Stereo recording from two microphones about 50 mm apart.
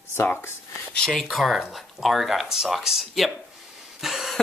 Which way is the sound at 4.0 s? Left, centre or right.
Centre.